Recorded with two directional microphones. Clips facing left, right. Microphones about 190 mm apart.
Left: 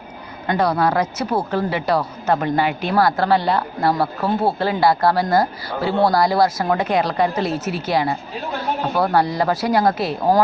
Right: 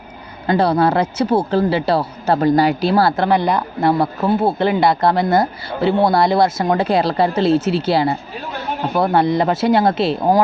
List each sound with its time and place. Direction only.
0.4 s a woman's voice: 30° right (ahead or behind)